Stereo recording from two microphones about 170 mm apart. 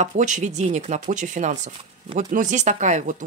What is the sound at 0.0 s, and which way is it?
Speech, 45° right (ahead or behind).